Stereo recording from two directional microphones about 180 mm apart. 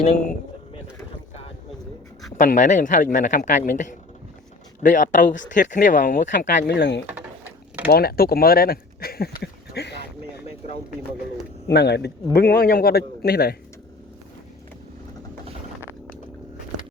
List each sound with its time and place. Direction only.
0.0 s speech: 40° left (ahead or behind)
2.4 s a man's voice: 45° left (ahead or behind)
6.7 s speech: 75° left (ahead or behind)
7.1 s a sound: 10° right (ahead or behind)
7.9 s speech: 60° left (ahead or behind)
11.7 s a man's voice: 70° left (ahead or behind)